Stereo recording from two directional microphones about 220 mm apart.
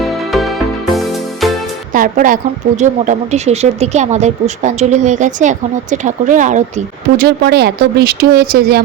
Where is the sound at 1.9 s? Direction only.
40° right (ahead or behind).